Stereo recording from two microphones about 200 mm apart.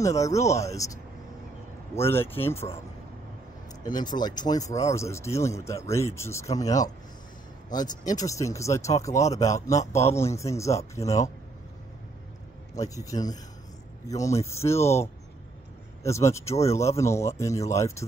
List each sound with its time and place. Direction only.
0.0 s speech: 15° left (ahead or behind)
2.0 s speech: 10° left (ahead or behind)
3.8 s speech: 20° left (ahead or behind)
12.7 s speech: 15° left (ahead or behind)